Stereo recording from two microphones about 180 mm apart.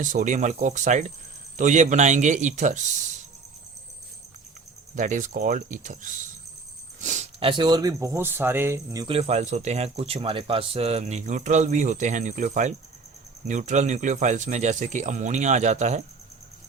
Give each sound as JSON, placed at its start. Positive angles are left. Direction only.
{"t": 0.0, "sound": "speech", "side_deg": -45}
{"t": 4.9, "sound": "speech", "side_deg": -45}
{"t": 9.0, "sound": "speech", "side_deg": -35}